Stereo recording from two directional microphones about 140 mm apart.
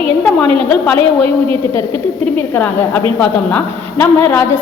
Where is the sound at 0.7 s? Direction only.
10° left (ahead or behind).